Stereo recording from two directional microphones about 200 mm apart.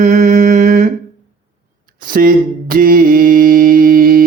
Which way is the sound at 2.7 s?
45° right (ahead or behind).